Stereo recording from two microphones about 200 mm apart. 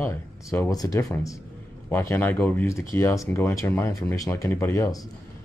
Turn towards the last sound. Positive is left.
turn(degrees=15)  # may be behind; listen again after turning